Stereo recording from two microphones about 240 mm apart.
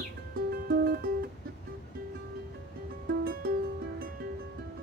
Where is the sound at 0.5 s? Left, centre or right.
Right.